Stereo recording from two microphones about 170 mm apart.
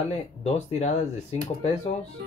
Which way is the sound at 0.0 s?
40° left (ahead or behind).